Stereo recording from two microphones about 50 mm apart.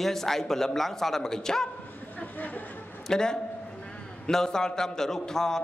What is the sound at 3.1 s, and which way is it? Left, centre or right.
A man's voice, centre.